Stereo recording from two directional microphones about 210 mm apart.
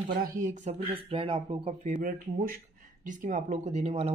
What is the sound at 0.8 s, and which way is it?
Speech, 25° right (ahead or behind).